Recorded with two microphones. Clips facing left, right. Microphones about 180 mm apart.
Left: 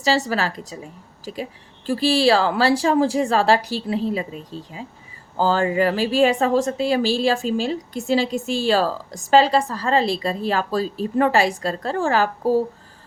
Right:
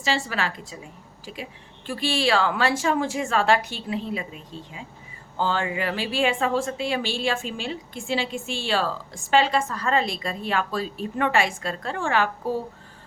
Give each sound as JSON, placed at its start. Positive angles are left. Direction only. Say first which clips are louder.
{"t": 0.0, "sound": "a woman's voice", "louder": "left 6 dB", "side_deg": 40}